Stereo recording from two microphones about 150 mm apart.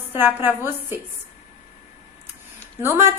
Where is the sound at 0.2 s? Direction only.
15° right (ahead or behind).